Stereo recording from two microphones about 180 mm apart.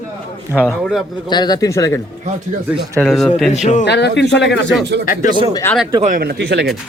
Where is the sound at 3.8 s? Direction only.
70° left (ahead or behind).